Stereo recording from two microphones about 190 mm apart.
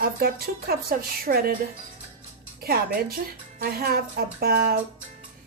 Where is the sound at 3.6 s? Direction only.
50° right (ahead or behind).